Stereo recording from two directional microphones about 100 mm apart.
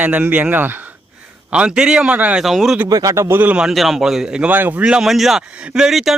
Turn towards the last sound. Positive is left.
turn(degrees=-5)  # may be behind; listen again after turning